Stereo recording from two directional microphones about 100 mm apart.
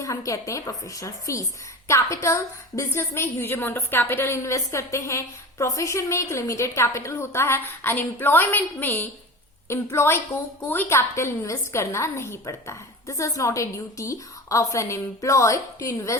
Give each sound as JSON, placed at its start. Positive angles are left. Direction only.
{"t": 0.0, "sound": "a woman's voice", "side_deg": 35}